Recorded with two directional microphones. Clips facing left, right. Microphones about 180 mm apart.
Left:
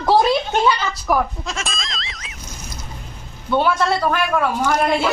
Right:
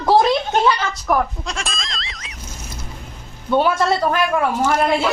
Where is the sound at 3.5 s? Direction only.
10° right (ahead or behind).